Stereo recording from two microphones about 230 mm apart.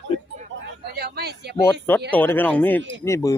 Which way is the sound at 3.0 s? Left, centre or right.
Centre.